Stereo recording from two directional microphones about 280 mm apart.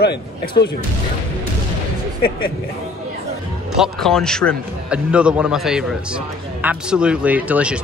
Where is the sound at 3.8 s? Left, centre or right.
Centre.